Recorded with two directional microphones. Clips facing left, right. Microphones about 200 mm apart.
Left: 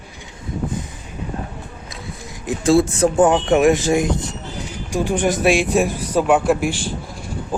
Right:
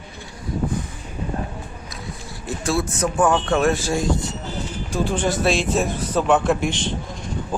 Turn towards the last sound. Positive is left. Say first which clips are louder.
# even
turn(degrees=10)  # may be behind; listen again after turning